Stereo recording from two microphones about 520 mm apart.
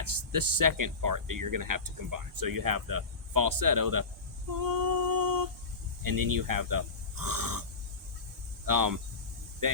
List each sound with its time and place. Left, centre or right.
0.0 s speech: right
4.5 s female singing: right
6.0 s speech: right
8.6 s speech: right